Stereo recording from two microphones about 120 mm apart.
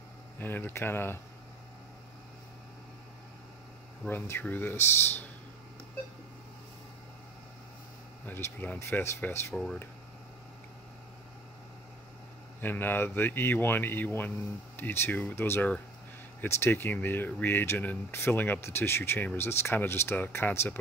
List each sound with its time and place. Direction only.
0.4 s speech: 15° left (ahead or behind)
4.0 s speech: 15° left (ahead or behind)
8.3 s speech: 20° left (ahead or behind)
9.5 s speech: 5° left (ahead or behind)
12.6 s speech: 15° left (ahead or behind)